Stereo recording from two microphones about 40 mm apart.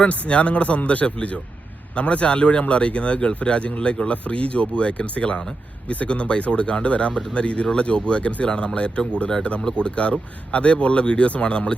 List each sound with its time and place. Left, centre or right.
0.0 s speech: left